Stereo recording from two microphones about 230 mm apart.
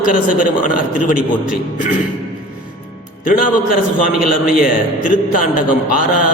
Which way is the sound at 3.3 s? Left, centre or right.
Left.